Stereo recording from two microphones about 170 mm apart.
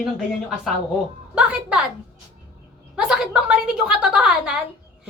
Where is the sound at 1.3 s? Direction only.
5° right (ahead or behind).